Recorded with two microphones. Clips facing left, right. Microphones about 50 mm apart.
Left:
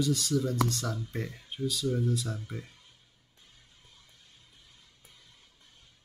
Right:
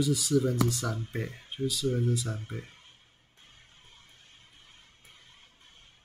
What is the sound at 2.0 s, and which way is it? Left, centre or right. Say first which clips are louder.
Speech: right 1 dB; centre.